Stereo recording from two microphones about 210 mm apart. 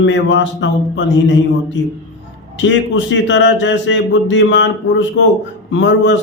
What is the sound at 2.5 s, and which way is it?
A man's voice, 60° left (ahead or behind).